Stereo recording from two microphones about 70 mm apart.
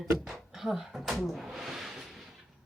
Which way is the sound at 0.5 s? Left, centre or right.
Centre.